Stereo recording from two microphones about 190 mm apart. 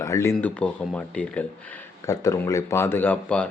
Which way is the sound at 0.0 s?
15° left (ahead or behind).